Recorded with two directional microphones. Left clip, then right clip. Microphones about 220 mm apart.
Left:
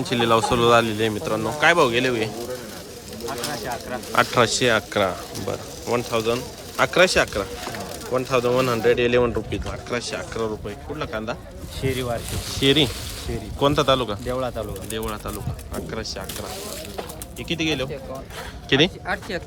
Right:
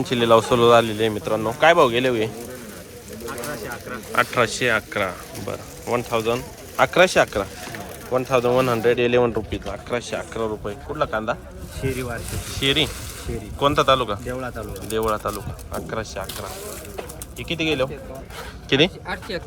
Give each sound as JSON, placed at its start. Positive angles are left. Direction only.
{"t": 0.0, "sound": "speech", "side_deg": 10}
{"t": 4.1, "sound": "speech", "side_deg": 15}
{"t": 11.8, "sound": "speech", "side_deg": 45}
{"t": 12.5, "sound": "speech", "side_deg": 20}
{"t": 14.3, "sound": "speech", "side_deg": 40}
{"t": 14.8, "sound": "speech", "side_deg": 10}
{"t": 17.5, "sound": "speech", "side_deg": 5}